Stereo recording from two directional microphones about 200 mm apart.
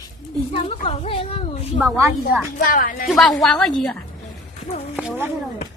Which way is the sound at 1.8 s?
15° right (ahead or behind).